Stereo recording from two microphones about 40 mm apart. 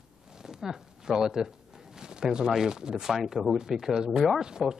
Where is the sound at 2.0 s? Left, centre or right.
Centre.